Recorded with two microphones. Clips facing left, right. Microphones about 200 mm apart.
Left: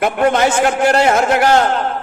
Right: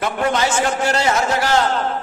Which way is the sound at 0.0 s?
55° left (ahead or behind).